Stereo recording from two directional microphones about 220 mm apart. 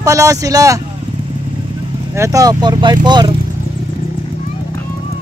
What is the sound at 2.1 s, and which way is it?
Speech, 15° right (ahead or behind).